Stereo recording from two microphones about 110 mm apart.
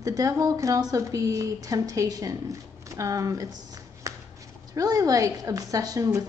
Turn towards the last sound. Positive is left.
turn(degrees=-30)  # may be behind; listen again after turning